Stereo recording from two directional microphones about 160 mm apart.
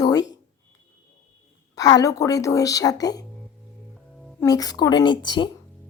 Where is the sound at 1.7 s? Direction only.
20° left (ahead or behind).